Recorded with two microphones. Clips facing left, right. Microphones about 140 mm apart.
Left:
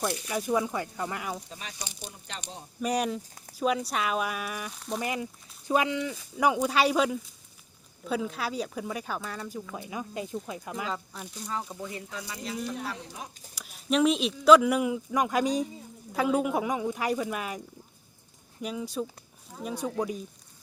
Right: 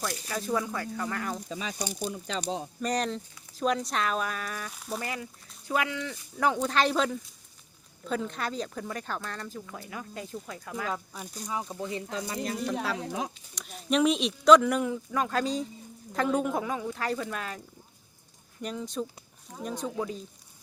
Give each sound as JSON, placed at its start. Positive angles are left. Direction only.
{"t": 0.0, "sound": "speech", "side_deg": 15}
{"t": 1.7, "sound": "speech", "side_deg": -45}
{"t": 2.8, "sound": "speech", "side_deg": 10}
{"t": 4.7, "sound": "speech", "side_deg": -5}
{"t": 4.9, "sound": "speech", "side_deg": 20}
{"t": 10.8, "sound": "speech", "side_deg": -5}
{"t": 11.7, "sound": "speech", "side_deg": -20}
{"t": 12.2, "sound": "speech", "side_deg": -50}
{"t": 12.6, "sound": "speech", "side_deg": -85}
{"t": 13.6, "sound": "speech", "side_deg": 5}
{"t": 18.6, "sound": "speech", "side_deg": 5}